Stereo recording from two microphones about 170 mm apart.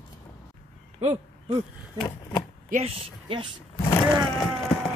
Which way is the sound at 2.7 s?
35° right (ahead or behind).